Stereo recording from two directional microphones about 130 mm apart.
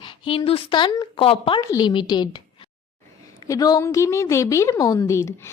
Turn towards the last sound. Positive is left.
turn(degrees=25)  # may be behind; listen again after turning